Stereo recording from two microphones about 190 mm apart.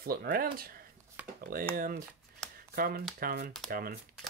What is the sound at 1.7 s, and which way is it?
Speech, 55° right (ahead or behind).